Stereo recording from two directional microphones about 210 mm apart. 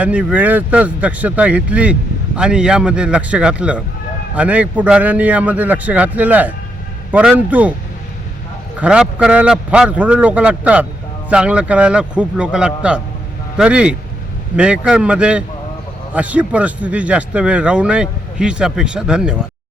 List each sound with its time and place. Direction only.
0.0 s a man's voice: 5° right (ahead or behind)
8.8 s speech: 5° right (ahead or behind)